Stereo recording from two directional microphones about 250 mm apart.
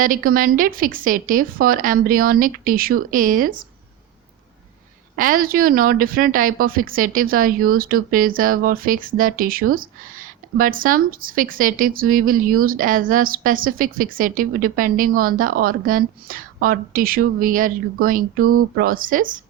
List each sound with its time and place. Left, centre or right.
0.0 s a woman's voice: right
5.1 s a woman's voice: right